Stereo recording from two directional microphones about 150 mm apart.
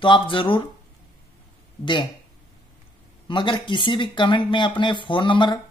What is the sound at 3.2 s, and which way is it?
Speech, 30° left (ahead or behind).